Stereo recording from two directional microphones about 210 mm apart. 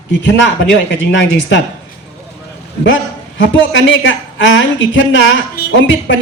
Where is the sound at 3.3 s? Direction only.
60° left (ahead or behind).